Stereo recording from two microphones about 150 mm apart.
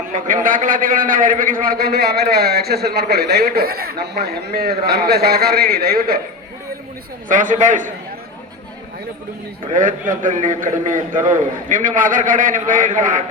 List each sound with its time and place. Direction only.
0.1 s a man's voice: 60° right (ahead or behind); by 6.1 s 90° right
7.3 s a man's voice: 60° right (ahead or behind)
9.7 s a man's voice: 60° right (ahead or behind)